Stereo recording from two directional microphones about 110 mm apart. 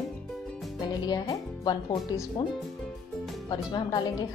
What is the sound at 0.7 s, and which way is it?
Speech, 40° left (ahead or behind).